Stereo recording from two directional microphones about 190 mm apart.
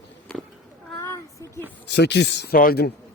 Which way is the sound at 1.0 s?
15° left (ahead or behind).